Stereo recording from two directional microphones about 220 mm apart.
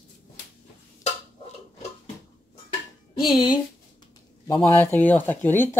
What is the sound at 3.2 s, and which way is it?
Music, 20° left (ahead or behind).